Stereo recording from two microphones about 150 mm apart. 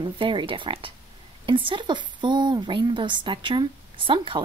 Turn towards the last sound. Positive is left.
turn(degrees=-35)  # may be behind; listen again after turning